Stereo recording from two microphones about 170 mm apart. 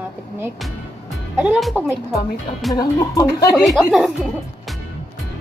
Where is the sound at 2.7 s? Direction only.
20° left (ahead or behind).